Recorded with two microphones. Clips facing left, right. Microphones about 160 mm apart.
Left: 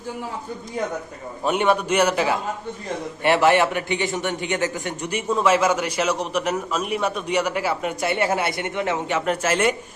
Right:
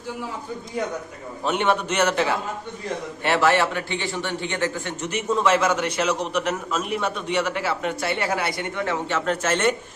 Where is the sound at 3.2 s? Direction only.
15° left (ahead or behind).